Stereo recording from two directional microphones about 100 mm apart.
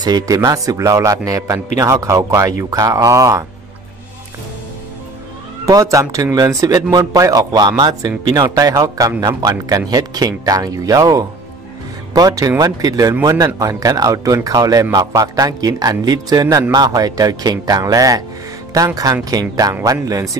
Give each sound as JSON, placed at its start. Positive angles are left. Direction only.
{"t": 0.0, "sound": "speech", "side_deg": -40}
{"t": 5.7, "sound": "speech", "side_deg": -35}
{"t": 19.2, "sound": "speech", "side_deg": -35}